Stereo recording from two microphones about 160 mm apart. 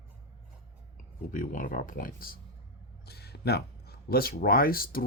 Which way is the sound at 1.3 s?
55° left (ahead or behind).